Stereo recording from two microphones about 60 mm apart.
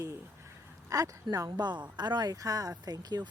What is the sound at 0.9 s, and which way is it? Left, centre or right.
Speech, right.